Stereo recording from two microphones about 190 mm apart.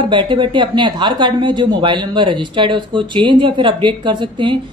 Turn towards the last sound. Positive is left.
turn(degrees=-25)  # may be behind; listen again after turning